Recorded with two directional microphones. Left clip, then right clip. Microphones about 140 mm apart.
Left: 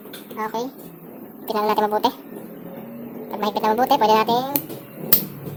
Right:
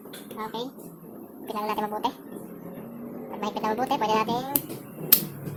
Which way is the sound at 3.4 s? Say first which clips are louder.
Left 8 dB; 25° left (ahead or behind).